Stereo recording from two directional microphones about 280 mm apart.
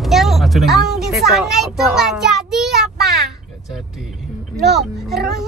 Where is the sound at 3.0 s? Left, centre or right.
Right.